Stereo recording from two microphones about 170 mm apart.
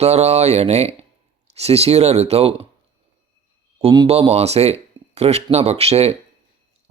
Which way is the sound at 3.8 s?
30° right (ahead or behind).